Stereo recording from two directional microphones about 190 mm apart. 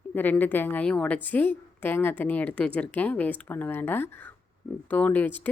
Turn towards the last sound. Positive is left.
turn(degrees=10)  # may be behind; listen again after turning